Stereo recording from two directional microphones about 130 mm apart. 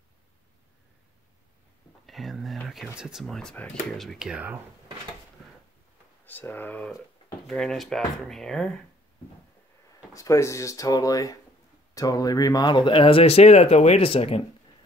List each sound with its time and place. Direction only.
2.0 s speech: centre (ahead or behind)
4.0 s speech: centre (ahead or behind)
6.2 s speech: 15° left (ahead or behind)
10.1 s speech: 25° left (ahead or behind); by 14.4 s 45° left (ahead or behind)